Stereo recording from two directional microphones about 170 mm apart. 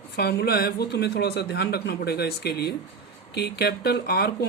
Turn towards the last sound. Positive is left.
turn(degrees=65)  # may be behind; listen again after turning